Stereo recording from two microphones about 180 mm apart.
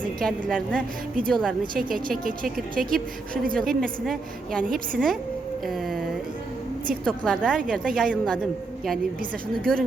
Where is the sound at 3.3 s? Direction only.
50° right (ahead or behind).